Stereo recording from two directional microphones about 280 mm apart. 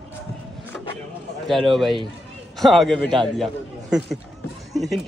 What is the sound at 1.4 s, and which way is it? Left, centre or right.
Speech, centre.